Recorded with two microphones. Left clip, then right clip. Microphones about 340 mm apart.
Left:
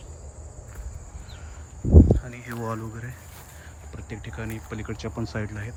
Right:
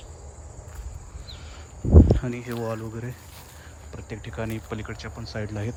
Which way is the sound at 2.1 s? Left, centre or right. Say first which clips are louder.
Right 4 dB; centre.